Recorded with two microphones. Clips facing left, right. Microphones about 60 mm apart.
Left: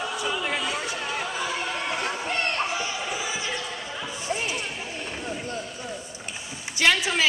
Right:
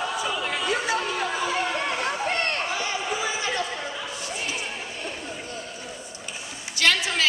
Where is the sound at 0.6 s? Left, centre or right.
Right.